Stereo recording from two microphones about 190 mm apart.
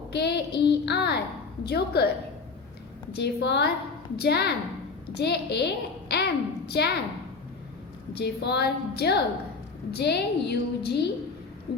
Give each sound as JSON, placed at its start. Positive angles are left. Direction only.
{"t": 0.1, "sound": "a child's voice", "side_deg": 60}
{"t": 3.2, "sound": "a woman's voice", "side_deg": 60}
{"t": 8.2, "sound": "a woman's voice", "side_deg": 60}